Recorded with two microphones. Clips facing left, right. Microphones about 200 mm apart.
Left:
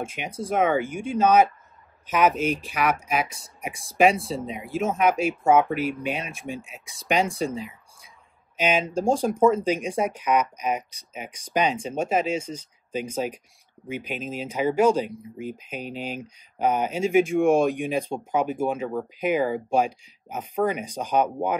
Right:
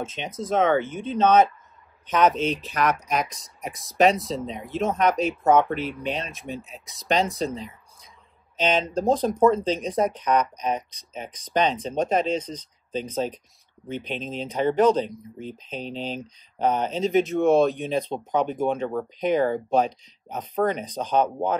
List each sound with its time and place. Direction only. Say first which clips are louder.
0.0 s speech: even; 10° left (ahead or behind)